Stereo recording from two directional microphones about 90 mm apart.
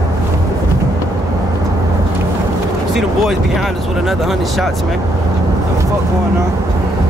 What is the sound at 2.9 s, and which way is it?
Speech, 5° right (ahead or behind).